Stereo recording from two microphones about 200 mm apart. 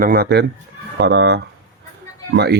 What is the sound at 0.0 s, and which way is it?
Speech, 50° right (ahead or behind).